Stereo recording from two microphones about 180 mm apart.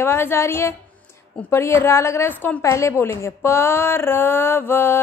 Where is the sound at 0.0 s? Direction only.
15° left (ahead or behind).